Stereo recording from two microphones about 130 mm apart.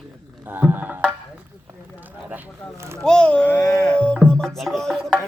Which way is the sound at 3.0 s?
5° left (ahead or behind).